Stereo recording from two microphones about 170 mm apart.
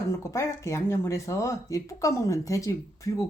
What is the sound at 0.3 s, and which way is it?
Speech, 15° left (ahead or behind).